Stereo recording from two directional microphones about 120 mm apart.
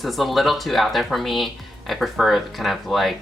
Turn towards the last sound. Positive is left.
turn(degrees=0)  # may be behind; listen again after turning